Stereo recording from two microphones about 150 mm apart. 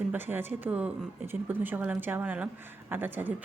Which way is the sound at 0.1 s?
15° right (ahead or behind).